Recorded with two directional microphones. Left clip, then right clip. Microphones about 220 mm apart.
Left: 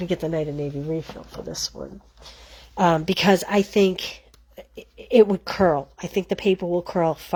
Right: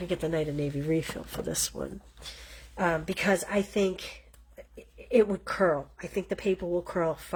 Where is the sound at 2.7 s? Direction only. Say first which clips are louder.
Left 9 dB; 40° left (ahead or behind).